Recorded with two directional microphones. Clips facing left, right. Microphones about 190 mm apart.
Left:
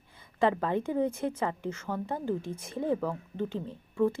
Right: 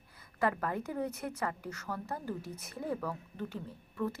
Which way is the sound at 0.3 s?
25° left (ahead or behind).